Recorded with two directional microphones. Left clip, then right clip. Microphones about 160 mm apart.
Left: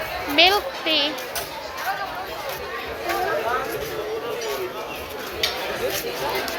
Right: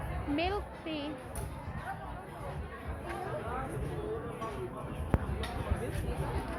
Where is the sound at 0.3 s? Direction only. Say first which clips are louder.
Left 18 dB; 5° right (ahead or behind).